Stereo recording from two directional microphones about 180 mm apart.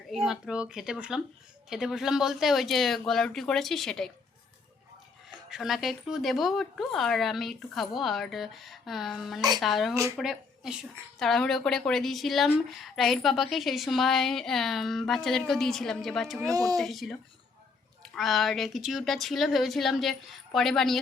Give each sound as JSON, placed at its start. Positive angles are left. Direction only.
{"t": 0.1, "sound": "a woman's voice", "side_deg": -5}
{"t": 5.5, "sound": "a woman's voice", "side_deg": 0}
{"t": 9.9, "sound": "speech", "side_deg": -15}
{"t": 10.2, "sound": "a woman's voice", "side_deg": 0}
{"t": 16.4, "sound": "speech", "side_deg": -20}
{"t": 16.7, "sound": "a woman's voice", "side_deg": 0}